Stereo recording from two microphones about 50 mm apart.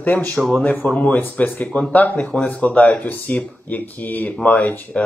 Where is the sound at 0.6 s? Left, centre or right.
Left.